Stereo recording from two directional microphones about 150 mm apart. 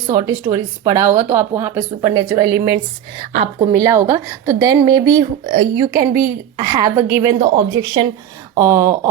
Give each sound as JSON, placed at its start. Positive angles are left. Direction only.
{"t": 0.1, "sound": "a woman's voice", "side_deg": -20}
{"t": 7.3, "sound": "a woman's voice", "side_deg": -35}